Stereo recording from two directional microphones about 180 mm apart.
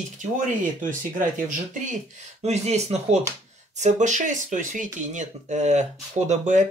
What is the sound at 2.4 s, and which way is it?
Speech, 40° right (ahead or behind).